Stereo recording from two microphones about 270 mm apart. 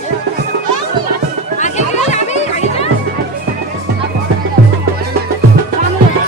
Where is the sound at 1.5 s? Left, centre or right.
Left.